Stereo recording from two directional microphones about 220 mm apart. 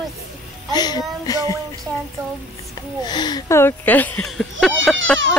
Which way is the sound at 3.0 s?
20° left (ahead or behind).